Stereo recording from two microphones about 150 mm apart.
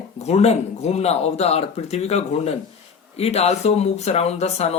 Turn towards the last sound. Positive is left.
turn(degrees=45)  # may be behind; listen again after turning